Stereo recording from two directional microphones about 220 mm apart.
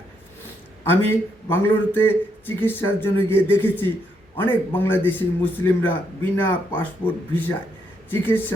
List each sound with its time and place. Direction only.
0.9 s a man's voice: 10° left (ahead or behind)